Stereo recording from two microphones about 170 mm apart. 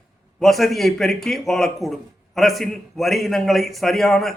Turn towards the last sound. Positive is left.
turn(degrees=0)  # may be behind; listen again after turning